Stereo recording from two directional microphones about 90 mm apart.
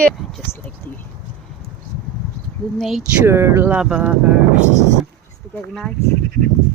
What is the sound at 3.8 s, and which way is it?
Speech, 10° right (ahead or behind).